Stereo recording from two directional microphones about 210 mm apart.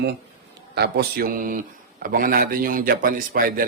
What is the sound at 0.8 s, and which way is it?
Speech, 50° right (ahead or behind).